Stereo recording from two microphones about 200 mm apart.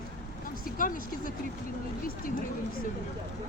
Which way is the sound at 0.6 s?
45° left (ahead or behind).